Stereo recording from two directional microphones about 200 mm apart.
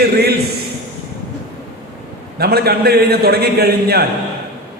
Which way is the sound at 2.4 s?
50° right (ahead or behind).